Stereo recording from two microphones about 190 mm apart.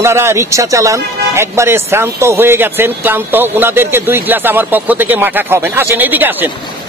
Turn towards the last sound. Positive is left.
turn(degrees=-10)  # may be behind; listen again after turning